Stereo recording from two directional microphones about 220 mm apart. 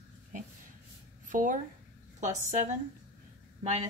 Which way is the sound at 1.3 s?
35° right (ahead or behind).